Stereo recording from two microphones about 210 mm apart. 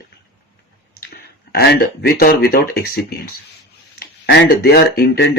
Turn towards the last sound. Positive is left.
turn(degrees=45)  # may be behind; listen again after turning